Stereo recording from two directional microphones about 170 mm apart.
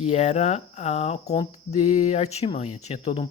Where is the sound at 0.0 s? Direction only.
40° left (ahead or behind).